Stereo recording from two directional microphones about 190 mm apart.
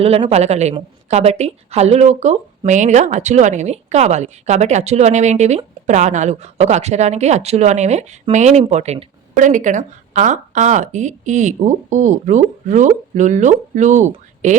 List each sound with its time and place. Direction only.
0.0 s a woman's voice: 30° right (ahead or behind)